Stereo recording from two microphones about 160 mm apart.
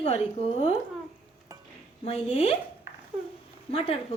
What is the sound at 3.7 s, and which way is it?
Speech, 40° left (ahead or behind).